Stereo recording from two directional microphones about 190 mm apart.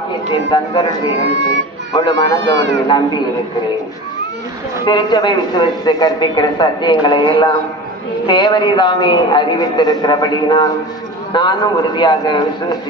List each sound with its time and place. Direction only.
0.3 s speech: 20° left (ahead or behind)
2.1 s speech: 70° right (ahead or behind)
4.8 s speech: 20° left (ahead or behind)